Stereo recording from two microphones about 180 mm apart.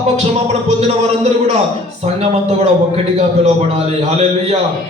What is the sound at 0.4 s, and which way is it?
Speech, 35° right (ahead or behind).